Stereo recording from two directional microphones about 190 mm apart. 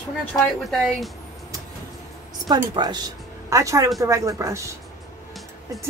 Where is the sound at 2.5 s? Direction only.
20° right (ahead or behind).